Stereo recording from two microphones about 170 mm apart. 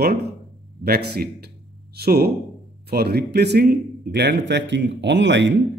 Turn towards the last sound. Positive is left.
turn(degrees=-90)